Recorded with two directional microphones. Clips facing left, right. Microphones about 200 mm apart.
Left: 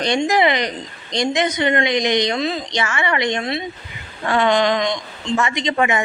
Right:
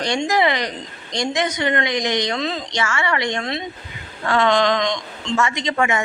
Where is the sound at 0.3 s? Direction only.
20° left (ahead or behind).